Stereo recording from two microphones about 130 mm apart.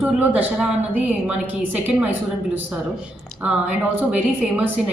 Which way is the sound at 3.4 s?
10° right (ahead or behind).